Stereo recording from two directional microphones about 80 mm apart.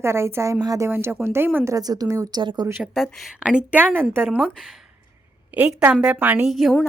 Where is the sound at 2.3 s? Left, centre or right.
Right.